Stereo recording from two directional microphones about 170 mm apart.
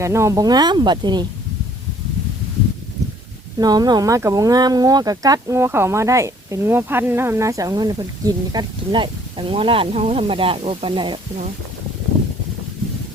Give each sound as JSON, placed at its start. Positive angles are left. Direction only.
{"t": 0.0, "sound": "speech", "side_deg": -15}
{"t": 3.6, "sound": "speech", "side_deg": -25}